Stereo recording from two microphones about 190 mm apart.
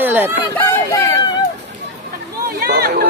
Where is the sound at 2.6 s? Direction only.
55° right (ahead or behind).